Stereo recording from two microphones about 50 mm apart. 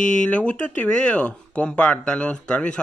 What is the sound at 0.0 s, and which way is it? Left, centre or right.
Speech, left.